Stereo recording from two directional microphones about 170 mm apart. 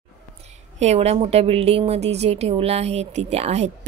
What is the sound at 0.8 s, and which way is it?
A woman's voice, 40° right (ahead or behind).